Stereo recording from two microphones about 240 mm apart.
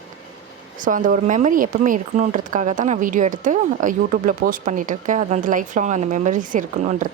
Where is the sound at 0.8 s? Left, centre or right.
Right.